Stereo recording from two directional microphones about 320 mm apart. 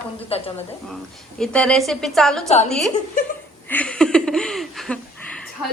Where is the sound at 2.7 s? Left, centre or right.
Centre.